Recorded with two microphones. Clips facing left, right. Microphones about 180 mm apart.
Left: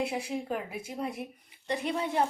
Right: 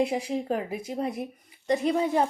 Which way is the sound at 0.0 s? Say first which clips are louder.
Right 6 dB; 35° right (ahead or behind).